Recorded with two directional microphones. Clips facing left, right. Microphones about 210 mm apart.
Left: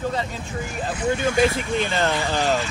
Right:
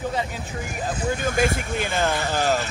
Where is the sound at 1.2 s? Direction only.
50° right (ahead or behind).